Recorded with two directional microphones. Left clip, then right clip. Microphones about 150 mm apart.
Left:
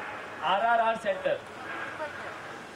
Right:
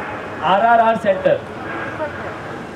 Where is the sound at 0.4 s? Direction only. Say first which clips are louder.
Right 12 dB; 15° right (ahead or behind).